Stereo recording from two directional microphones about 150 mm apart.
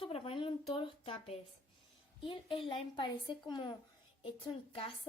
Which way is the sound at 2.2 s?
35° left (ahead or behind).